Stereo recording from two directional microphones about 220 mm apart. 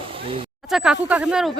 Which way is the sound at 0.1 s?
25° right (ahead or behind).